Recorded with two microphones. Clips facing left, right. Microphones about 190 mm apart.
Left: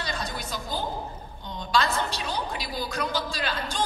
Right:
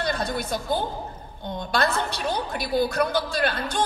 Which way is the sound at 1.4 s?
55° right (ahead or behind).